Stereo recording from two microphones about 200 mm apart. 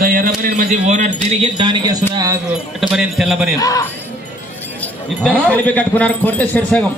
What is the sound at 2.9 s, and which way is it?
Speech, centre (ahead or behind).